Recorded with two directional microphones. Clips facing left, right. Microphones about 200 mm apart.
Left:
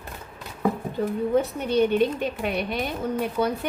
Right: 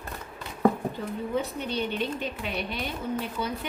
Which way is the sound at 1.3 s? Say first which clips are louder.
Left 8 dB; 50° left (ahead or behind).